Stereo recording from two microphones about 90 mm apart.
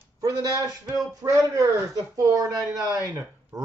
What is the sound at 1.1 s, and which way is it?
A man's voice, 35° right (ahead or behind).